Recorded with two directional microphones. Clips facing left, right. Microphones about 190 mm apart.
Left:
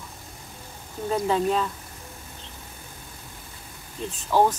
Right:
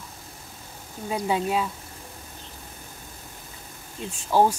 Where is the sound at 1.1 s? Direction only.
10° right (ahead or behind).